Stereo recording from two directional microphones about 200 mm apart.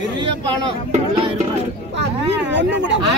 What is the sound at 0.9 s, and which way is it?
Speech, 35° right (ahead or behind).